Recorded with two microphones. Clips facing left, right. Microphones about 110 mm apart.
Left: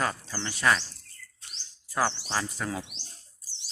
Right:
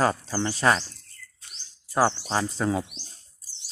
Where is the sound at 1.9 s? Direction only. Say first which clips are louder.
Right 5 dB; 30° right (ahead or behind).